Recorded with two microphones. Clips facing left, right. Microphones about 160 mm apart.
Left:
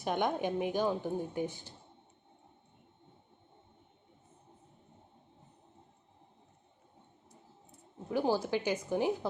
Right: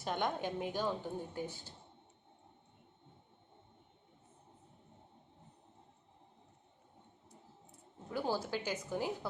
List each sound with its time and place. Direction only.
0.0 s a woman's voice: 15° left (ahead or behind)
8.1 s a woman's voice: 15° left (ahead or behind)